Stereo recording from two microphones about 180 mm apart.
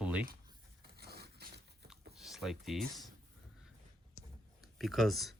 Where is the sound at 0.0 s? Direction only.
5° right (ahead or behind).